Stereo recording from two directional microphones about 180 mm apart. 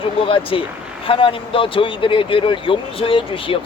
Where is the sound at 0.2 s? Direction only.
30° left (ahead or behind).